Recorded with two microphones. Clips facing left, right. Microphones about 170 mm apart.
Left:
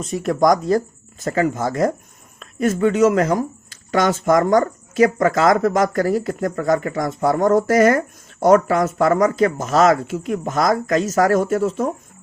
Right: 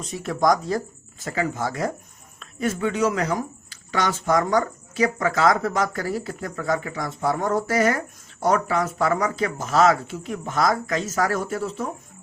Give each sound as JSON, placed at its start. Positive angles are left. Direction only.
{"t": 0.1, "sound": "speech", "side_deg": 45}